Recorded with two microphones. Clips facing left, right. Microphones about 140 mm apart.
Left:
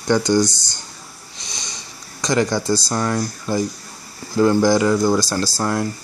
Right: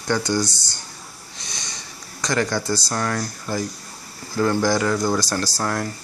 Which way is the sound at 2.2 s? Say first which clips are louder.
Left 4 dB; 15° left (ahead or behind).